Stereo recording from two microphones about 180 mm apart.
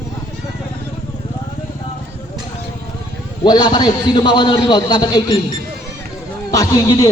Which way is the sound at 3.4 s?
25° left (ahead or behind).